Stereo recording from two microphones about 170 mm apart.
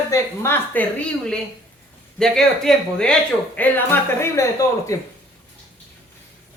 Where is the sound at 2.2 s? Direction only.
5° left (ahead or behind).